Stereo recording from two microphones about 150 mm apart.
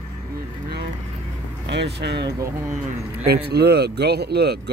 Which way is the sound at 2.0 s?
90° right.